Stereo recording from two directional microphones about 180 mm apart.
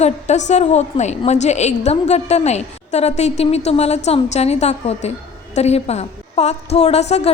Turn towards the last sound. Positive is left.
turn(degrees=35)  # may be behind; listen again after turning